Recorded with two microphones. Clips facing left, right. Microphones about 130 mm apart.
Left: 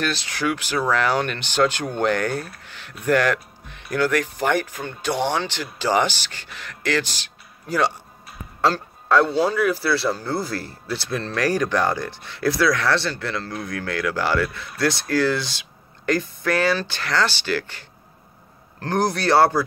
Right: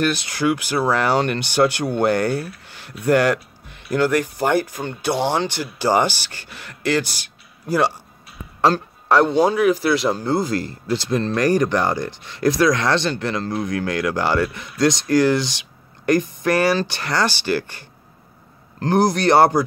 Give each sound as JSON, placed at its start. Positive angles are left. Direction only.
{"t": 0.1, "sound": "a man's voice", "side_deg": -15}
{"t": 18.8, "sound": "a man's voice", "side_deg": -15}